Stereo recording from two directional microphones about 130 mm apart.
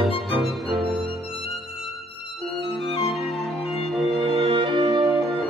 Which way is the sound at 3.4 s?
Centre (ahead or behind).